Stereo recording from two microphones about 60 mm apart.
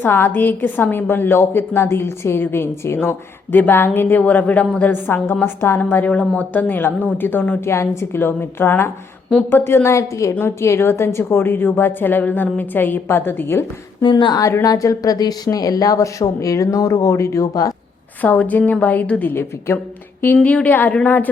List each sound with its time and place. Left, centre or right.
0.0 s a woman's voice: left
6.1 s a woman's voice: left
7.7 s a woman's voice: left
14.3 s speech: left
18.2 s a woman's voice: left
19.3 s a woman's voice: left
20.4 s a woman's voice: left